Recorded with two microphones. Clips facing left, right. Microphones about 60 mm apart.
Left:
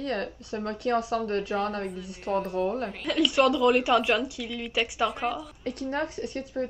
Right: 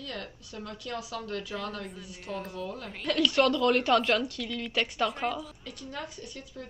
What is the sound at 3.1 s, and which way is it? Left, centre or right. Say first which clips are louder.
Speech: left 2 dB; centre.